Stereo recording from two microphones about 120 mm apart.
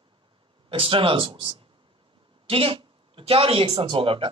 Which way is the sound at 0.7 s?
50° right (ahead or behind).